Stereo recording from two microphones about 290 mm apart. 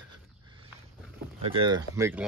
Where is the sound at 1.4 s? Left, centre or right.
Centre.